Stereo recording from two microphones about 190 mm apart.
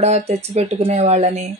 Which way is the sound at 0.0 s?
35° right (ahead or behind).